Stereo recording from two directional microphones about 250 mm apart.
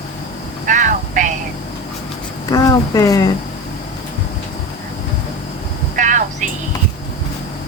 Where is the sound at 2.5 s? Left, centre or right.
Centre.